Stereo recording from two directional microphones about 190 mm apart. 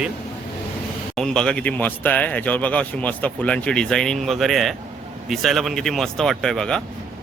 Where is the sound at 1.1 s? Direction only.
5° left (ahead or behind).